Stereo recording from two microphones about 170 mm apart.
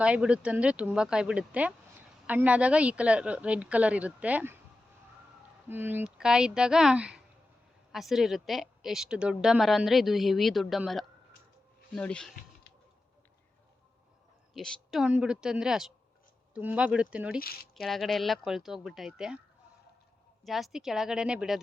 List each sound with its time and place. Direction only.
0.0 s speech: 5° right (ahead or behind)
5.6 s a woman's voice: 10° right (ahead or behind); by 12.3 s 5° left (ahead or behind)
14.5 s a woman's voice: centre (ahead or behind)
17.4 s speech: 65° left (ahead or behind)
17.7 s a woman's voice: centre (ahead or behind)
20.4 s a woman's voice: centre (ahead or behind)